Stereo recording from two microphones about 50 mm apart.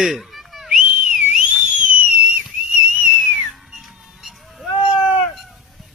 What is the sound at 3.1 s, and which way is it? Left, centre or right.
Whistle, left.